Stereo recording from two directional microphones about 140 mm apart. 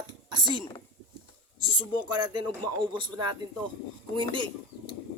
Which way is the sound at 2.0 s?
35° right (ahead or behind).